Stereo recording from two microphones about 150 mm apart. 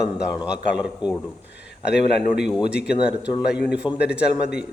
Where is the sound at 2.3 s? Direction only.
5° right (ahead or behind).